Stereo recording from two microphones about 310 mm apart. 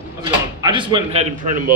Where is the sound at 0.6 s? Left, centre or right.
Centre.